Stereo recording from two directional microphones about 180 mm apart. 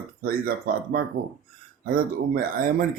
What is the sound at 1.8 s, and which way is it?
Speech, 50° right (ahead or behind).